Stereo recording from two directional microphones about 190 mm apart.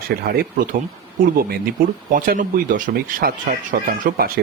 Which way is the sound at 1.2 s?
50° right (ahead or behind).